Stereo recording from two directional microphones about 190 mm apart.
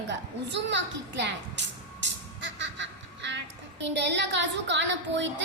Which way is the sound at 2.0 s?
70° right (ahead or behind).